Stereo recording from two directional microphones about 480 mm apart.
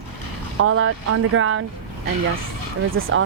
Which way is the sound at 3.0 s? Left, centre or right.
Right.